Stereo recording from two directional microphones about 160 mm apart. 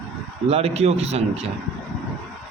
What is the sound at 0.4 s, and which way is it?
A man's voice, 40° right (ahead or behind).